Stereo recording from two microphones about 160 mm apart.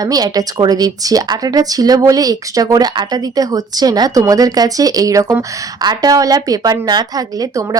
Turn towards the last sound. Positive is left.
turn(degrees=-20)  # may be behind; listen again after turning